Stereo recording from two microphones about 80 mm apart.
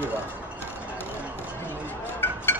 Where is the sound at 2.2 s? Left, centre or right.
Left.